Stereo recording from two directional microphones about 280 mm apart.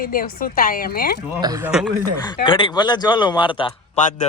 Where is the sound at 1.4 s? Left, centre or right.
Centre.